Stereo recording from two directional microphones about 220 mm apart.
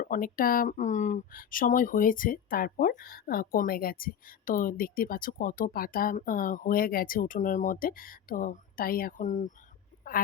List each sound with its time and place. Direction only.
0.0 s speech: 40° left (ahead or behind)